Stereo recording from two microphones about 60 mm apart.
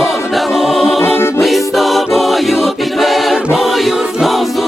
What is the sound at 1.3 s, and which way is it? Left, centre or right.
A capella, centre.